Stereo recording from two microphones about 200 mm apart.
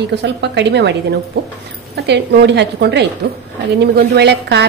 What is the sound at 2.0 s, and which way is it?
A woman's voice, 55° right (ahead or behind).